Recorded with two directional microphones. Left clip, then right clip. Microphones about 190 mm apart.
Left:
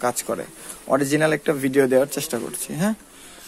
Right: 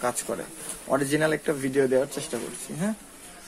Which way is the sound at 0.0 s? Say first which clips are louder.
Left 5 dB; 35° left (ahead or behind).